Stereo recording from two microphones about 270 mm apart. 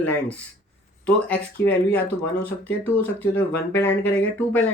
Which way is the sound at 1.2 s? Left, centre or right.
Centre.